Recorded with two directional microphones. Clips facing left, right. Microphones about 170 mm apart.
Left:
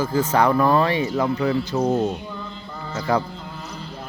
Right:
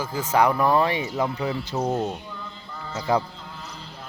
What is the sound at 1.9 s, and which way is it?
Speech, 20° left (ahead or behind).